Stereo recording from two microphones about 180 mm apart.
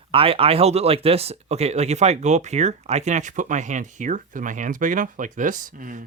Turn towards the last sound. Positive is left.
turn(degrees=-45)  # may be behind; listen again after turning